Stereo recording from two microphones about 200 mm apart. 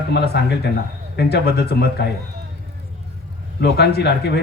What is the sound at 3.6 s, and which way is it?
Speech, 55° left (ahead or behind).